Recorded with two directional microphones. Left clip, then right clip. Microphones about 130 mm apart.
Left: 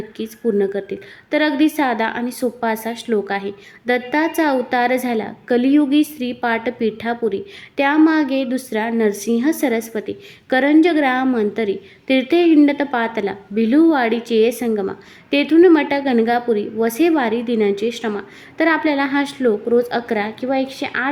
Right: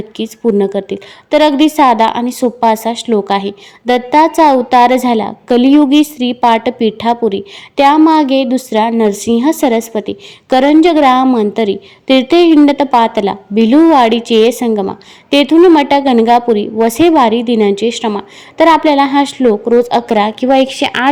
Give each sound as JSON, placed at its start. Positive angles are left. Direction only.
{"t": 0.2, "sound": "a woman's voice", "side_deg": -40}